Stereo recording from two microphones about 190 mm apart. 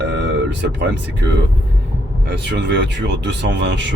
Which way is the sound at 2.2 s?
65° right (ahead or behind).